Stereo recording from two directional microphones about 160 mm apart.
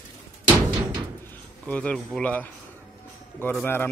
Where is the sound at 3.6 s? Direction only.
15° left (ahead or behind).